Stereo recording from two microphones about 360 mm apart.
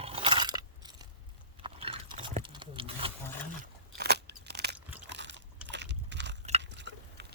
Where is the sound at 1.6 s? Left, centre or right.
Centre.